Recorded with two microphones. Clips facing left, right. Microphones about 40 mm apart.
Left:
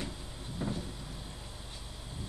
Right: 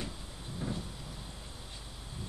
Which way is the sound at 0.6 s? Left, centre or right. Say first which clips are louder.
Left 2 dB; centre.